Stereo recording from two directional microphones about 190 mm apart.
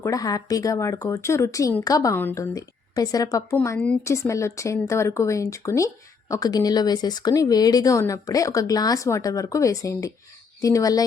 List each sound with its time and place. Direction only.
0.0 s speech: 20° left (ahead or behind)